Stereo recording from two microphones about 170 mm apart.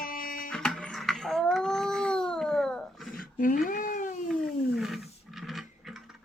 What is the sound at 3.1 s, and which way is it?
Cat, 55° left (ahead or behind).